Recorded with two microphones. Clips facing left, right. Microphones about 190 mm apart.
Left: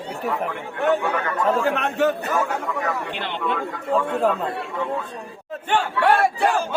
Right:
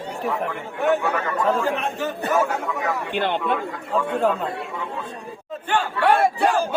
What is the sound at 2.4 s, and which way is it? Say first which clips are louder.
Crowd: right 1 dB; centre (ahead or behind).